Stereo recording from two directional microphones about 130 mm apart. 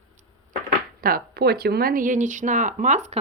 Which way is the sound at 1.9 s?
85° right.